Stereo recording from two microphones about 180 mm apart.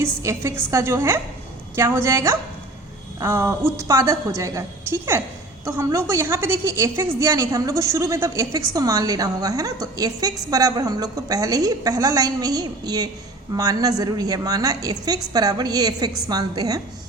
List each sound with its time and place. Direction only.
0.0 s a woman's voice: 15° right (ahead or behind)